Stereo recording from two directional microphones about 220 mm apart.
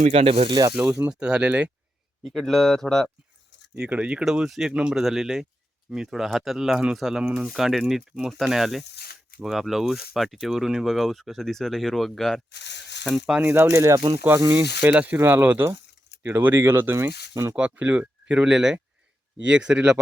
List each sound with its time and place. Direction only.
0.0 s speech: 25° right (ahead or behind)
0.8 s speech: 10° right (ahead or behind)
12.5 s speech: 50° left (ahead or behind)
13.1 s speech: 5° right (ahead or behind)